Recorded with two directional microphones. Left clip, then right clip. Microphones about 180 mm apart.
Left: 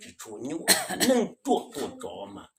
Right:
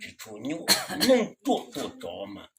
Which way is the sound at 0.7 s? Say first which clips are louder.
Right 1 dB; 20° left (ahead or behind).